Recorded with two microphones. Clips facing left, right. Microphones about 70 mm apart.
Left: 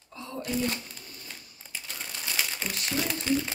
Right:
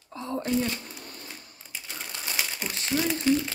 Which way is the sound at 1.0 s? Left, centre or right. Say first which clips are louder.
Right 4 dB; right.